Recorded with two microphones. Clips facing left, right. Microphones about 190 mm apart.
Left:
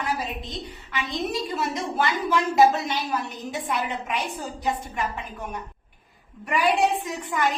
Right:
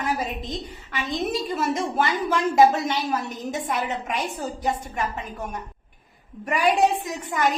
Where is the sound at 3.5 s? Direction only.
45° right (ahead or behind).